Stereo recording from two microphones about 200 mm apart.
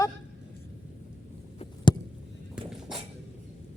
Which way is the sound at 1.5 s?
25° left (ahead or behind).